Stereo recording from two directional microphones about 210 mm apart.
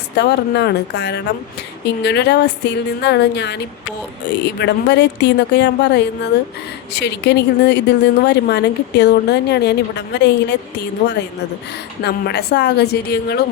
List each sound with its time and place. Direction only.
0.2 s a woman's voice: 55° left (ahead or behind)
12.0 s a woman's voice: 50° left (ahead or behind)